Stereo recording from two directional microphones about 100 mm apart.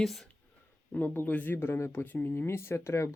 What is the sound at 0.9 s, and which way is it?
Speech, 20° left (ahead or behind).